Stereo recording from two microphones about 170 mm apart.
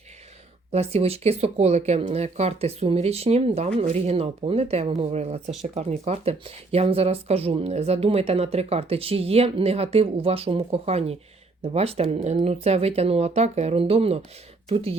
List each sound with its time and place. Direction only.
0.7 s speech: 35° right (ahead or behind)